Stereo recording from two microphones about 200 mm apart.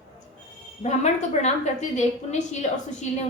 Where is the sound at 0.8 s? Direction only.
35° left (ahead or behind).